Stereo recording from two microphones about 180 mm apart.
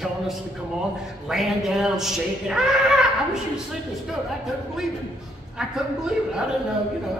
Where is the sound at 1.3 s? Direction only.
Centre (ahead or behind).